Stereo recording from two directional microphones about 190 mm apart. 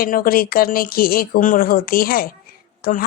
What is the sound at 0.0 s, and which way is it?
Speech, 50° left (ahead or behind).